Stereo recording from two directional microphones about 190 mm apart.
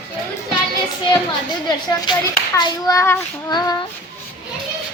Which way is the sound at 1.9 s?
20° left (ahead or behind).